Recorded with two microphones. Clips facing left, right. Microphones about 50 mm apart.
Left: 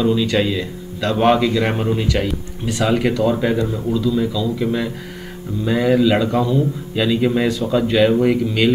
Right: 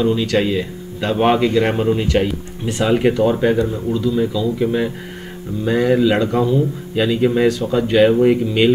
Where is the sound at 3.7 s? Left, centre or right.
Centre.